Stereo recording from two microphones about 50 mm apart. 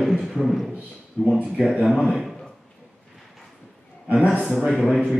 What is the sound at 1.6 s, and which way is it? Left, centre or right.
Speech, centre.